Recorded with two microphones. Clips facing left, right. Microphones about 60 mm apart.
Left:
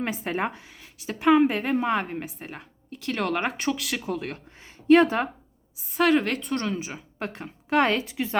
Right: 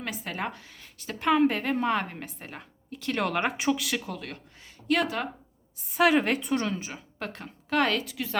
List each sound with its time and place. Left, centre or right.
0.0 s a woman's voice: left
0.8 s a woman's voice: centre
4.0 s speech: centre
5.7 s a woman's voice: centre
6.7 s a woman's voice: centre; by 8.4 s left